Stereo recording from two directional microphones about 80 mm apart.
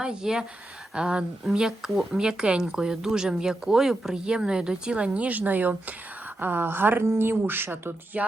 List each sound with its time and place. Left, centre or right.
0.0 s speech: centre; by 8.2 s right